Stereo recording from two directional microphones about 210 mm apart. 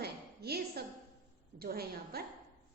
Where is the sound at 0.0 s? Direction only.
50° right (ahead or behind).